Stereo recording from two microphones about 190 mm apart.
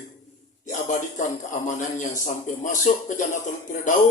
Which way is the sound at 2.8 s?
40° left (ahead or behind).